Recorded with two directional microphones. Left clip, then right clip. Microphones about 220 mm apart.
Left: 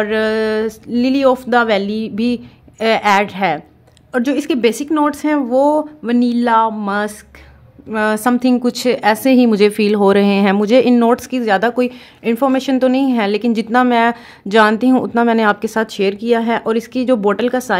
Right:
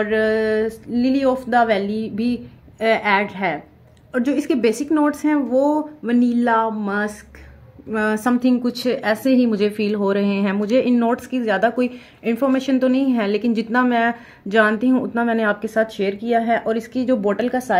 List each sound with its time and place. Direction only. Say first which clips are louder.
0.0 s a woman's voice: left 2 dB; 45° left (ahead or behind)